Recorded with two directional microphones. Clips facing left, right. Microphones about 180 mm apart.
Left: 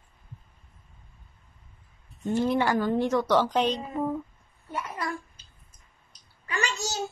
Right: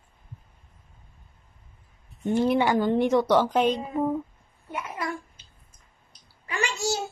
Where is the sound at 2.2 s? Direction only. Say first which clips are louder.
Right 2 dB; 20° right (ahead or behind).